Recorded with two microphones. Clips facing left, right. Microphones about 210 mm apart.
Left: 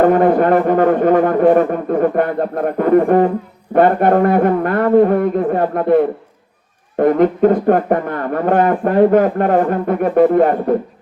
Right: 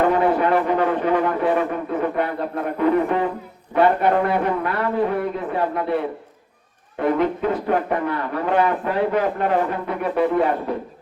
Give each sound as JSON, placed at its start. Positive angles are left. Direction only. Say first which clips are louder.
{"t": 0.0, "sound": "a man's voice", "louder": "left 6 dB", "side_deg": 45}